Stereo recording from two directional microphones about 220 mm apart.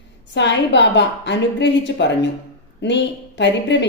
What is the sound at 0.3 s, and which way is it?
A woman's voice, 50° left (ahead or behind).